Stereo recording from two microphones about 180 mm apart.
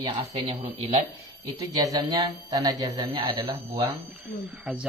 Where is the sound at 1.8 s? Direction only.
20° right (ahead or behind).